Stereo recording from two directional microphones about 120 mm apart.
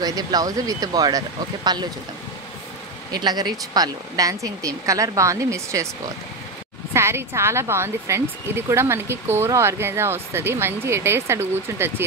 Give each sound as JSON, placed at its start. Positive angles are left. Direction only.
{"t": 0.0, "sound": "speech", "side_deg": -30}
{"t": 3.1, "sound": "speech", "side_deg": -35}
{"t": 6.9, "sound": "speech", "side_deg": -20}